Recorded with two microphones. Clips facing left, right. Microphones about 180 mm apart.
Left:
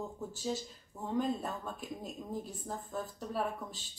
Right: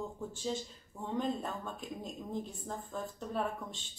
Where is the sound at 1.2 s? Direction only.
5° left (ahead or behind).